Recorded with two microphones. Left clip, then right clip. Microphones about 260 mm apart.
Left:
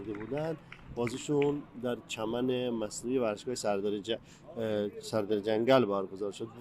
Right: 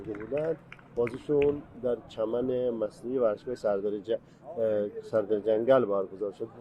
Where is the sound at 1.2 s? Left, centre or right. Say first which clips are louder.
Right 3 dB; left.